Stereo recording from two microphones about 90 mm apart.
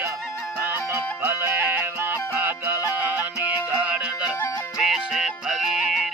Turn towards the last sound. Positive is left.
turn(degrees=-10)  # may be behind; listen again after turning